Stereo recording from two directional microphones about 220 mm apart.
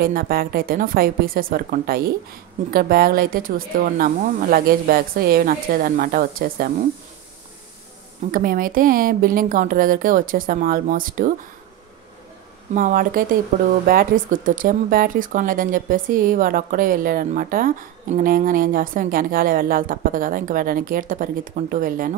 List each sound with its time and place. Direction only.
0.0 s speech: 40° right (ahead or behind)
8.3 s speech: 40° right (ahead or behind)
12.7 s speech: 40° right (ahead or behind)